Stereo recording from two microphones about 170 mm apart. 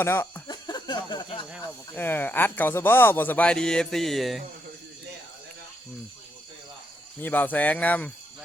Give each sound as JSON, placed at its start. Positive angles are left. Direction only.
{"t": 0.0, "sound": "speech", "side_deg": 15}
{"t": 0.5, "sound": "a sound", "side_deg": 25}
{"t": 1.9, "sound": "speech", "side_deg": 10}
{"t": 7.2, "sound": "speech", "side_deg": 10}